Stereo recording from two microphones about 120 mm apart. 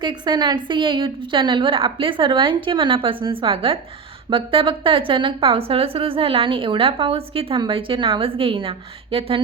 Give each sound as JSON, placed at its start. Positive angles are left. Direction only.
{"t": 0.0, "sound": "a woman's voice", "side_deg": -35}